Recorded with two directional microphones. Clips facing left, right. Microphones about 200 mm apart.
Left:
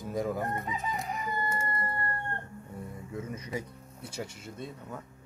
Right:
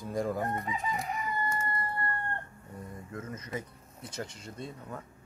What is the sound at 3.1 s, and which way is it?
Speech, 10° left (ahead or behind).